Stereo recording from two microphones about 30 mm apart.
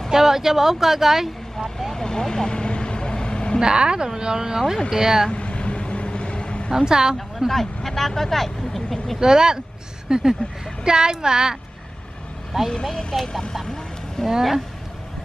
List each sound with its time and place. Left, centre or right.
0.1 s speech: centre
2.0 s speech: left
2.5 s vehicle: left
3.6 s speech: right
5.3 s vehicle: left
6.7 s speech: right
7.2 s speech: centre
9.2 s speech: right
12.5 s speech: centre